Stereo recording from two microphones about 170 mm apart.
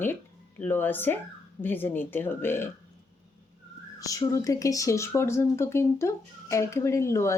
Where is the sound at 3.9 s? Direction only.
20° left (ahead or behind).